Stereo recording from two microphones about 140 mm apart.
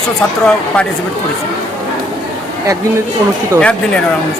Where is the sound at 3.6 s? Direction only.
5° left (ahead or behind).